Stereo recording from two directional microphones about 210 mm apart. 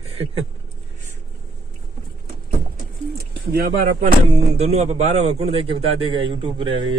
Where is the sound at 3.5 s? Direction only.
40° right (ahead or behind).